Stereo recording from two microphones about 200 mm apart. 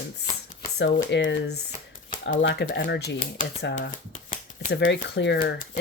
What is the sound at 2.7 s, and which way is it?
Speech, 55° left (ahead or behind).